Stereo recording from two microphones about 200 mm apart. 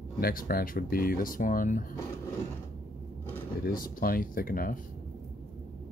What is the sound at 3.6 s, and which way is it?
Speech, 45° left (ahead or behind).